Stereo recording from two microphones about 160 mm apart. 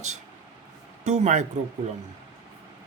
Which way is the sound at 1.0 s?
45° right (ahead or behind).